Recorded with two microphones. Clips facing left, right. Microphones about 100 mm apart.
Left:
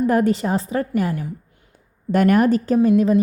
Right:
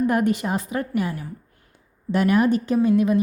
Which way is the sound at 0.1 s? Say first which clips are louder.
Left 3 dB; 30° left (ahead or behind).